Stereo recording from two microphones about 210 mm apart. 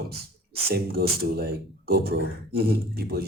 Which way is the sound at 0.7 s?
45° right (ahead or behind).